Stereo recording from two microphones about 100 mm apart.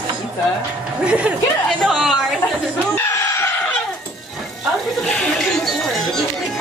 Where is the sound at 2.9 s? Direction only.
25° left (ahead or behind).